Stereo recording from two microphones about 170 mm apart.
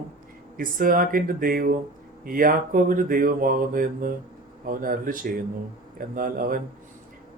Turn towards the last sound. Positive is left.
turn(degrees=-55)  # may be behind; listen again after turning